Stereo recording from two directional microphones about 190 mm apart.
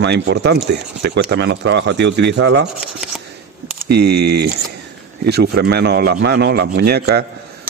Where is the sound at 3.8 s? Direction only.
60° right (ahead or behind).